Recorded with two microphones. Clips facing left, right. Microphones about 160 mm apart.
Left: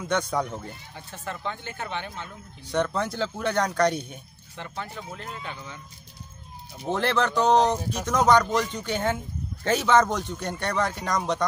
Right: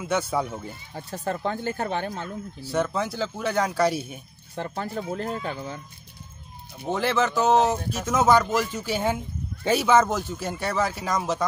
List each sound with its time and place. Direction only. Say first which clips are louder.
0.0 s speech: right 1 dB; 5° right (ahead or behind)
0.9 s speech: right 9 dB; 40° right (ahead or behind)
2.6 s speech: even; 5° right (ahead or behind)
4.6 s speech: right 6 dB; 40° right (ahead or behind)
6.8 s speech: right 1 dB; centre (ahead or behind)